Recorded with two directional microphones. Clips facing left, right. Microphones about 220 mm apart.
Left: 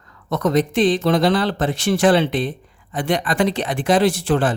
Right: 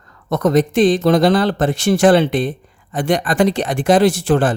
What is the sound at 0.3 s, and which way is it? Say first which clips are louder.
Speech: right 3 dB; 45° right (ahead or behind).